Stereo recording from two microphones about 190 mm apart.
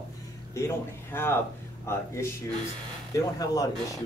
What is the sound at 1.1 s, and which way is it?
Speech, 10° left (ahead or behind).